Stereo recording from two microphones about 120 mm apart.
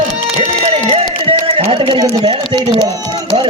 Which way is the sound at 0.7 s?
55° right (ahead or behind).